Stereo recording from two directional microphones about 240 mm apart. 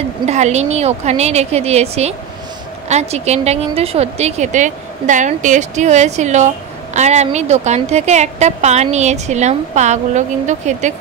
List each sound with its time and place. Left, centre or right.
0.3 s a woman's voice: right